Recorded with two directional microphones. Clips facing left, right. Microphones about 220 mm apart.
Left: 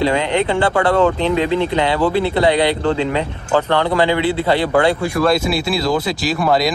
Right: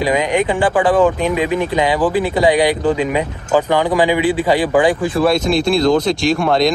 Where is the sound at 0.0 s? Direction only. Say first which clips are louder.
Right 1 dB; 15° right (ahead or behind).